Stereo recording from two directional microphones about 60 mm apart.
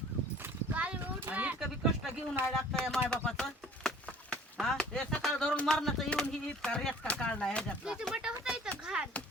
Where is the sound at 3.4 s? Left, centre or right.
Centre.